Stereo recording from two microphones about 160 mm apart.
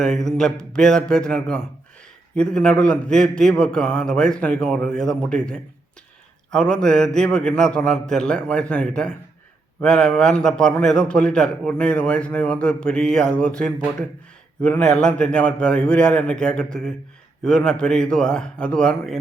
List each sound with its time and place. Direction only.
0.0 s a man's voice: 5° left (ahead or behind)